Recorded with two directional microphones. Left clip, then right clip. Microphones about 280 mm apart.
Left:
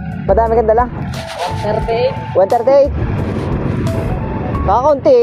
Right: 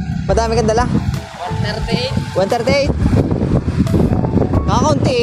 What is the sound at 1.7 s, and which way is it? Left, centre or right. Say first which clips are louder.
Speech: left 8 dB; right.